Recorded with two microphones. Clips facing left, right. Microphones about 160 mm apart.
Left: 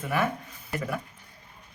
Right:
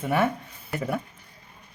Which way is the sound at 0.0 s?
30° right (ahead or behind).